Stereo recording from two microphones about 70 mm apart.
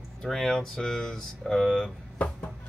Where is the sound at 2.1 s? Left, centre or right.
Centre.